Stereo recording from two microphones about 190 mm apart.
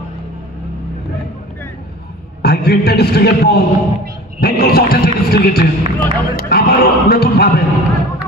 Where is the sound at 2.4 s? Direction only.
55° left (ahead or behind).